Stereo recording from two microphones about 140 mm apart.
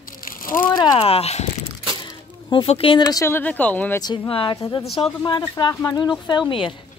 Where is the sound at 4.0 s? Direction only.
35° left (ahead or behind).